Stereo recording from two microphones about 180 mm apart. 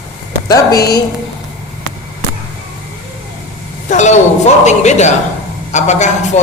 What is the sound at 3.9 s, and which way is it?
Speech, 40° left (ahead or behind).